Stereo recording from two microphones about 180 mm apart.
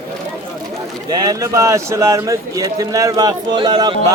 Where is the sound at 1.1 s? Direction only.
20° right (ahead or behind).